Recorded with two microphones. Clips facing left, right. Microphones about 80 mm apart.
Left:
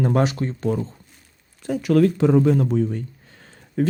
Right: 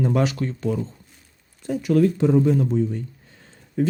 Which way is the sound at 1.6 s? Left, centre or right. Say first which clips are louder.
Left 1 dB; left.